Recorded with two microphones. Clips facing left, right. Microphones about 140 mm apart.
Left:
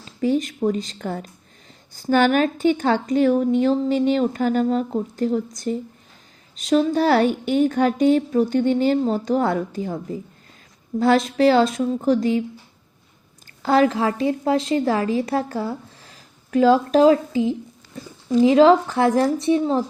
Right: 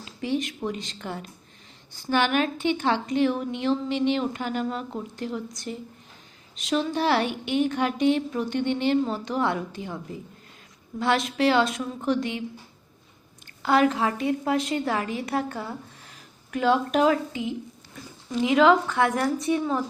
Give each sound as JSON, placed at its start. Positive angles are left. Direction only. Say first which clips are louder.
{"t": 0.0, "sound": "a woman's voice", "louder": "left 7 dB", "side_deg": 40}
{"t": 13.6, "sound": "a woman's voice", "louder": "left 4 dB", "side_deg": 35}